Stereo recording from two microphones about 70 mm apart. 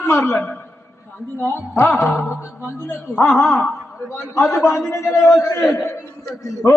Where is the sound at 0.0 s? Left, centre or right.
Left.